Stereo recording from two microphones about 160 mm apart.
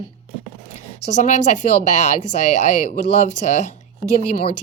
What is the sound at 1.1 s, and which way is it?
Speech, 45° left (ahead or behind).